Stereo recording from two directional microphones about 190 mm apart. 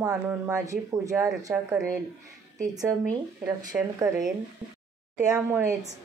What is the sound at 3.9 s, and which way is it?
Speech, 15° right (ahead or behind).